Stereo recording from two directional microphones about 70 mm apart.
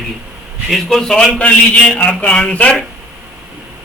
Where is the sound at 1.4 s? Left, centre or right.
Centre.